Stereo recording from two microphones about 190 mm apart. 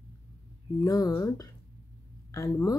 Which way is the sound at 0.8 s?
20° left (ahead or behind).